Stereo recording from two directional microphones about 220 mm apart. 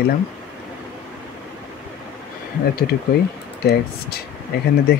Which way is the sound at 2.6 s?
45° left (ahead or behind).